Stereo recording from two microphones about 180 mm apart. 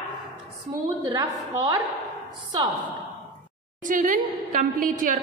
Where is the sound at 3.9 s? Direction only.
50° right (ahead or behind).